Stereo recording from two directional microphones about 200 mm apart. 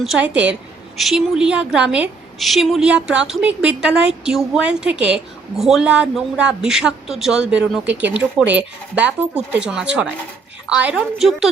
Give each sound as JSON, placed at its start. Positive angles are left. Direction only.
{"t": 0.0, "sound": "a woman's voice", "side_deg": 0}